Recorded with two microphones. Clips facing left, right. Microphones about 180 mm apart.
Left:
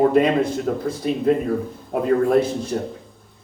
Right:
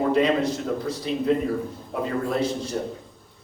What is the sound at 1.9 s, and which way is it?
Speech, 55° left (ahead or behind).